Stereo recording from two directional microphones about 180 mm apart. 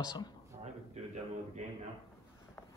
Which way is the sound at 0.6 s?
40° right (ahead or behind).